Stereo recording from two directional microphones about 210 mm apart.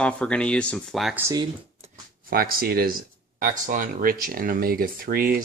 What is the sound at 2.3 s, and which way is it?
Speech, 45° right (ahead or behind).